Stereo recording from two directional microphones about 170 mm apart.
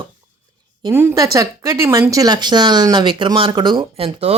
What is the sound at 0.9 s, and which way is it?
Speech, 15° right (ahead or behind).